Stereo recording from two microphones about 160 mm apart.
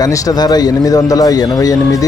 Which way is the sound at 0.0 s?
20° left (ahead or behind).